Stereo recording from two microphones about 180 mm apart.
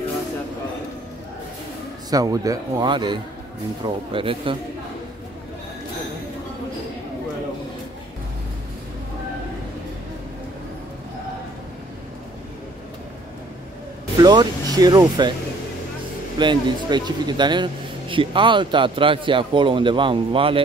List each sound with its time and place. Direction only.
2.0 s speech: 20° right (ahead or behind)
14.2 s speech: 20° right (ahead or behind)
16.3 s speech: 25° right (ahead or behind)